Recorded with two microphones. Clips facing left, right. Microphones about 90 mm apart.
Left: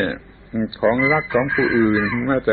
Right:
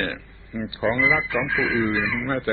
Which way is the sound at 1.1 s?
35° left (ahead or behind).